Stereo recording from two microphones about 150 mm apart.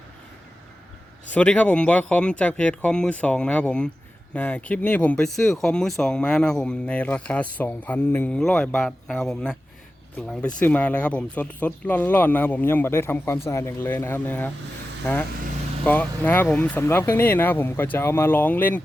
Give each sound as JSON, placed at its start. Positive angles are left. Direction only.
{"t": 1.3, "sound": "speech", "side_deg": 10}